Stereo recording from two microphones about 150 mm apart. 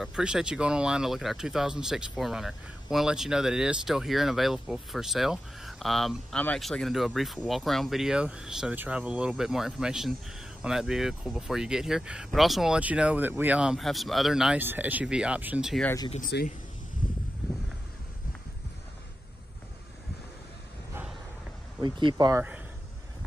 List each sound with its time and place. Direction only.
0.0 s speech: 5° right (ahead or behind)
16.2 s speech: 90° left
22.1 s speech: 20° right (ahead or behind)